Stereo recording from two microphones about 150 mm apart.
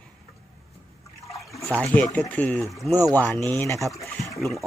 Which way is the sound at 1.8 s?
10° left (ahead or behind).